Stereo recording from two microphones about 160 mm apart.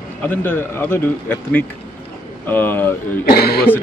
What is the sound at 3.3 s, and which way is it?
Speech, 75° left (ahead or behind).